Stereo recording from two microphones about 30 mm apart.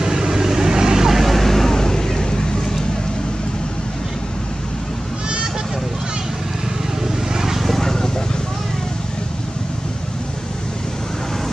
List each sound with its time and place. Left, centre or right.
0.0 s vehicle: centre
1.2 s vehicle: centre
1.7 s vehicle: centre
7.3 s vehicle: centre
7.6 s a sound: centre